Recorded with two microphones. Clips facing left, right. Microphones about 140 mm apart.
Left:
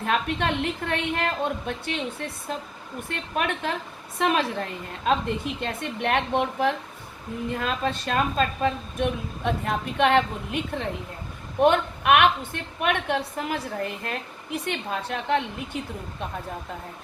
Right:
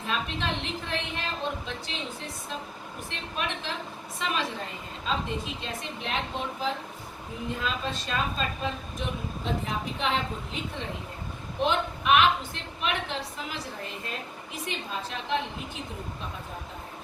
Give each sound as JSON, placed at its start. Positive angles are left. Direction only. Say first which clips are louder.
{"t": 0.0, "sound": "a woman's voice", "louder": "left 6 dB", "side_deg": 60}